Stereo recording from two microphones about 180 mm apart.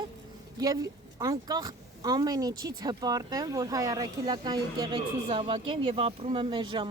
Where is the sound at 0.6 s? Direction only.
20° right (ahead or behind).